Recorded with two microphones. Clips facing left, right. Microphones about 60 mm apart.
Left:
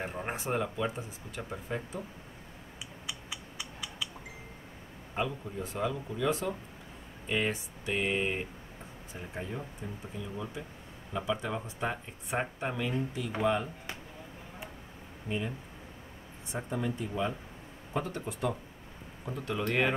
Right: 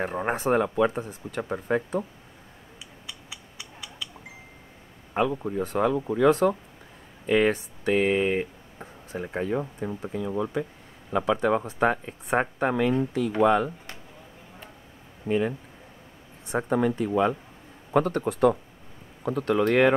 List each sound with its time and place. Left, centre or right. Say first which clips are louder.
0.1 s speech: right 10 dB; right
5.1 s speech: right 9 dB; right
7.2 s speech: right 10 dB; right
15.2 s speech: right 10 dB; right
16.5 s speech: right 10 dB; right